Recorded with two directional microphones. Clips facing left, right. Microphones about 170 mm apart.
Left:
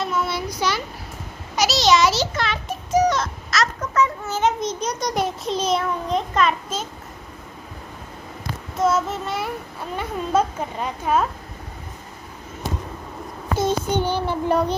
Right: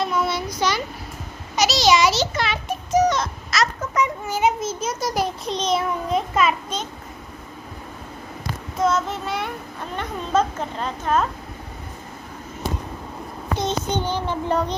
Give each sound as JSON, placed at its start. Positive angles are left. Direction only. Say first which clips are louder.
{"t": 0.0, "sound": "a sound", "louder": "right 1 dB", "side_deg": 5}
{"t": 1.7, "sound": "a child's voice", "louder": "even", "side_deg": 0}
{"t": 2.9, "sound": "a sound", "louder": "even", "side_deg": 10}
{"t": 3.9, "sound": "a child's voice", "louder": "left 1 dB", "side_deg": -15}
{"t": 8.7, "sound": "a child's voice", "louder": "left 1 dB", "side_deg": 5}
{"t": 13.6, "sound": "a woman's voice", "louder": "left 3 dB", "side_deg": 10}